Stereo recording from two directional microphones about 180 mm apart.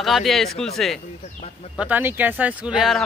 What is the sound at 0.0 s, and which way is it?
Speech, centre (ahead or behind).